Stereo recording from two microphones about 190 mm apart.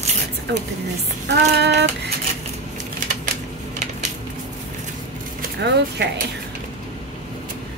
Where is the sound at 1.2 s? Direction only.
60° right (ahead or behind).